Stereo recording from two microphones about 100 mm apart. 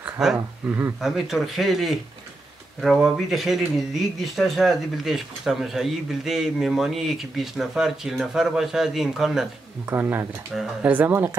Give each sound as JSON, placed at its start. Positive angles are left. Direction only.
{"t": 0.0, "sound": "a sound", "side_deg": -5}
{"t": 0.7, "sound": "speech", "side_deg": -20}
{"t": 1.0, "sound": "speech", "side_deg": -5}
{"t": 9.8, "sound": "speech", "side_deg": -20}
{"t": 10.5, "sound": "speech", "side_deg": -5}
{"t": 10.9, "sound": "speech", "side_deg": -20}